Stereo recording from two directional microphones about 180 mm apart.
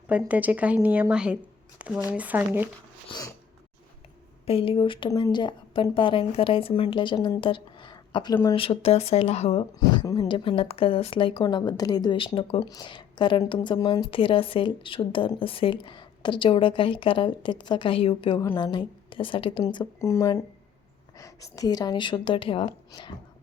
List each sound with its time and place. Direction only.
0.1 s a woman's voice: 10° right (ahead or behind)
3.1 s speech: 20° left (ahead or behind)
4.4 s speech: 30° left (ahead or behind)